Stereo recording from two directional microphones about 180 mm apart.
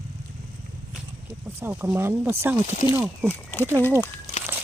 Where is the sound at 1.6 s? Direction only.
10° right (ahead or behind).